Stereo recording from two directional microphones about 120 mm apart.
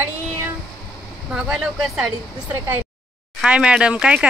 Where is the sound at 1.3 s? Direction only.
5° right (ahead or behind).